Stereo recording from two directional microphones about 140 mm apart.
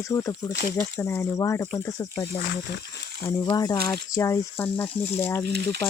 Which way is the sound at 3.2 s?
25° left (ahead or behind).